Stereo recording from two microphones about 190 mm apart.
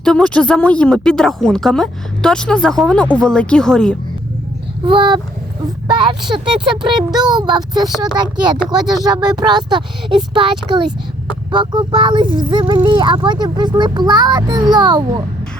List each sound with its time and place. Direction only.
0.0 s a woman's voice: 5° left (ahead or behind)
4.9 s speech: 25° right (ahead or behind)